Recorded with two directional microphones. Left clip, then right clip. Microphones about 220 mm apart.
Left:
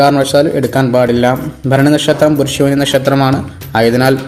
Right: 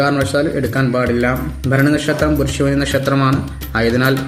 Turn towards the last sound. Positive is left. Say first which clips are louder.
# left 5 dB
turn(degrees=25)  # may be behind; listen again after turning